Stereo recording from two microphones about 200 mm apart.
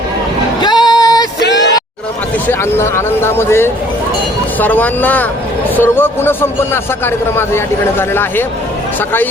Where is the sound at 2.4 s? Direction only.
10° left (ahead or behind).